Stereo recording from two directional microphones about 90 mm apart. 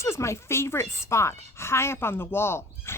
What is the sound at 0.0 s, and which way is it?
A woman's voice, 30° left (ahead or behind).